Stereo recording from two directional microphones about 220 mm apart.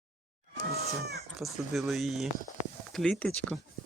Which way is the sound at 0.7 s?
45° right (ahead or behind).